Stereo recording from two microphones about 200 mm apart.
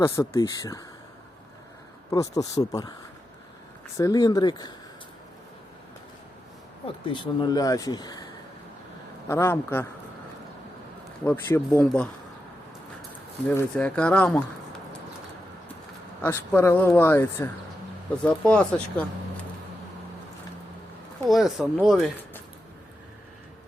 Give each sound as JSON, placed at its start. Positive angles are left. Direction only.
{"t": 0.0, "sound": "speech", "side_deg": 15}
{"t": 2.0, "sound": "speech", "side_deg": 15}
{"t": 3.9, "sound": "speech", "side_deg": 15}
{"t": 6.8, "sound": "speech", "side_deg": 25}
{"t": 9.3, "sound": "speech", "side_deg": 10}
{"t": 11.3, "sound": "speech", "side_deg": 10}
{"t": 13.5, "sound": "speech", "side_deg": 10}
{"t": 16.2, "sound": "speech", "side_deg": 10}
{"t": 21.2, "sound": "speech", "side_deg": 0}